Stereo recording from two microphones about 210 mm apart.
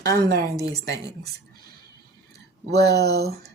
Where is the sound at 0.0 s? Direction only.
50° right (ahead or behind).